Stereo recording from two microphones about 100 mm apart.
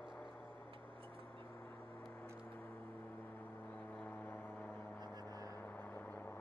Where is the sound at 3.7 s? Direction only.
15° left (ahead or behind).